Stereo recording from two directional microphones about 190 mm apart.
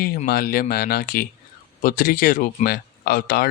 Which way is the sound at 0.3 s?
50° left (ahead or behind).